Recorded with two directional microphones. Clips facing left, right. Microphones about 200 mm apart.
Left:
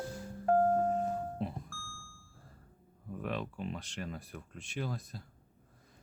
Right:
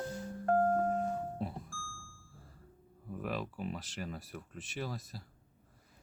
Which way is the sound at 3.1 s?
5° right (ahead or behind).